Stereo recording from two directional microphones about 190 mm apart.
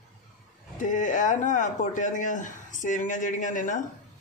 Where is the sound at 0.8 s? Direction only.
40° left (ahead or behind).